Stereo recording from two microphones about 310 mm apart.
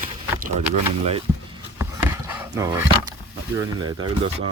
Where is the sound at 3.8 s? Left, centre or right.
Centre.